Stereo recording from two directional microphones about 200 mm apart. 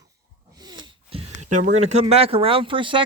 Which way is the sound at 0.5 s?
20° right (ahead or behind).